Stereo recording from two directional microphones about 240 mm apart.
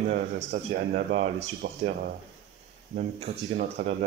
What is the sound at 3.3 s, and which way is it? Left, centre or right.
Speech, right.